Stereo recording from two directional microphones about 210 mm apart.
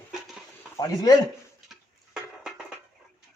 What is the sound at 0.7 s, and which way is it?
Speech, 15° left (ahead or behind).